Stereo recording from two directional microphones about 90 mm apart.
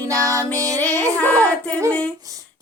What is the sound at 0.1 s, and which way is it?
Music, 40° right (ahead or behind).